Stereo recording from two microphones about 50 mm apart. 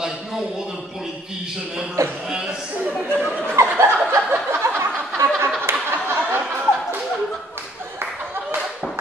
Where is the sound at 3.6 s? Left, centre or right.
Right.